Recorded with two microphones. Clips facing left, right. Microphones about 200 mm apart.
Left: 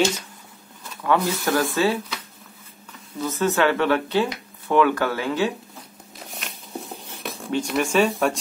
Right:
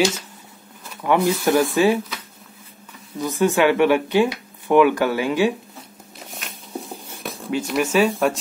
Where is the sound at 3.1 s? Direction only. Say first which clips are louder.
Right 3 dB; 15° right (ahead or behind).